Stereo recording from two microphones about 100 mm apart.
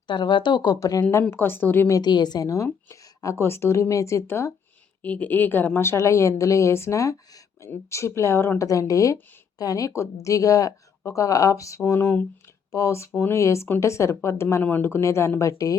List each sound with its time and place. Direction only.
0.1 s speech: 50° left (ahead or behind)
1.3 s a woman's voice: 20° left (ahead or behind)
1.9 s speech: 45° left (ahead or behind)
2.9 s a sound: 35° left (ahead or behind)
3.3 s a woman's voice: 25° left (ahead or behind)
5.0 s a woman's voice: 15° left (ahead or behind); by 11.8 s 30° left (ahead or behind)
11.8 s a woman's voice: 20° left (ahead or behind)
12.7 s a woman's voice: 30° left (ahead or behind)